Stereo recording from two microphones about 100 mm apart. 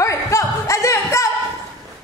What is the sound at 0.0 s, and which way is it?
Music, 30° left (ahead or behind).